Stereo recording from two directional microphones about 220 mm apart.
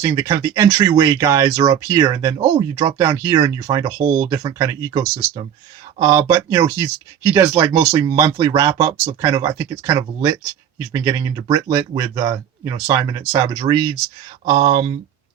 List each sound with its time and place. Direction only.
0.0 s speech: 20° right (ahead or behind)